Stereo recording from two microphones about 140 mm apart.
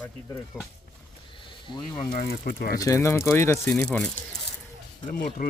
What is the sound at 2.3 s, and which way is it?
Speech, 90° left.